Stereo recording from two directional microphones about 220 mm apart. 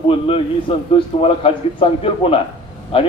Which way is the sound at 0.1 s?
25° left (ahead or behind).